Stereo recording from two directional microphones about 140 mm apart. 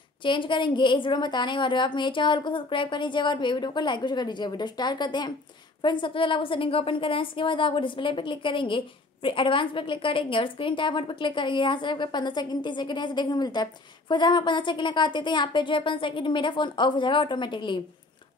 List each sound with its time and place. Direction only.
0.2 s a woman's voice: 35° left (ahead or behind)